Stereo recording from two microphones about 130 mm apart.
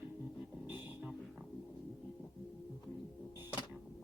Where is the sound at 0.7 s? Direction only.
15° right (ahead or behind).